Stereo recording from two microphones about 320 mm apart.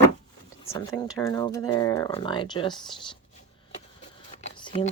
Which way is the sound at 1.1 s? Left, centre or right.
Centre.